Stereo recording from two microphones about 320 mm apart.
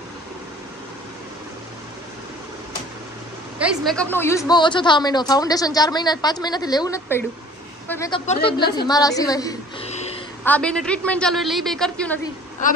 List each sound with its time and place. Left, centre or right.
3.5 s a woman's voice: centre
10.4 s a woman's voice: centre
12.6 s a woman's voice: left